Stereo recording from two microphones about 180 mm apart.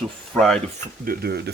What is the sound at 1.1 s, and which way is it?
Speech, 65° right (ahead or behind).